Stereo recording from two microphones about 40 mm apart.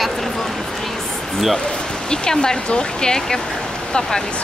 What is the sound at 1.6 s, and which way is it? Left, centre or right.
Speech, centre.